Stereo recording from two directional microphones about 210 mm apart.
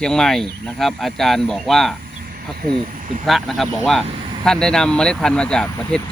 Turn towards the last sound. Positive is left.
turn(degrees=5)  # may be behind; listen again after turning